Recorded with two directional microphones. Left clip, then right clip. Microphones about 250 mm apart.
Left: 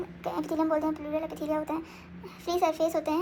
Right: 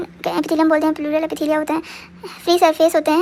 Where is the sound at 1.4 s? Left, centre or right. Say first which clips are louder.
Right 12 dB; right.